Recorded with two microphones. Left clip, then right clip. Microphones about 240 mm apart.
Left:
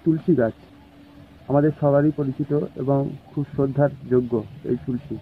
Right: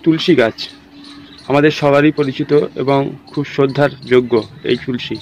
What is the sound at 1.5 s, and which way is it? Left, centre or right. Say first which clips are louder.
Speech: right 7 dB; right.